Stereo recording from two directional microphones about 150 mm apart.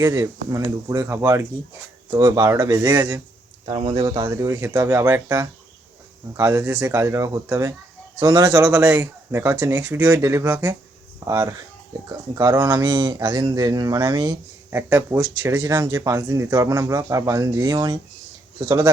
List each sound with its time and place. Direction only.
0.0 s speech: 20° right (ahead or behind)
3.7 s speech: 30° right (ahead or behind)